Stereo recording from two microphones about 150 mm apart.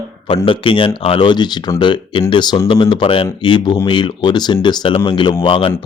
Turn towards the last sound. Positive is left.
turn(degrees=35)  # may be behind; listen again after turning